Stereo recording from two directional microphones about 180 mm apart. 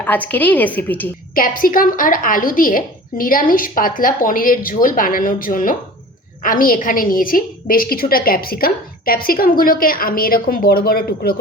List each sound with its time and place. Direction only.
0.0 s a woman's voice: 10° left (ahead or behind)
1.4 s a woman's voice: 50° left (ahead or behind)